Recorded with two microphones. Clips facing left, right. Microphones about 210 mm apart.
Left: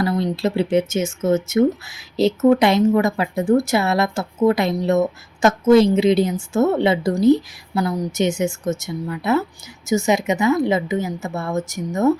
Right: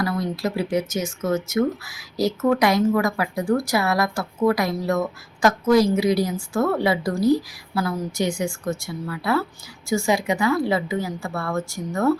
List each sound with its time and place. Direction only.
0.0 s a woman's voice: 25° left (ahead or behind)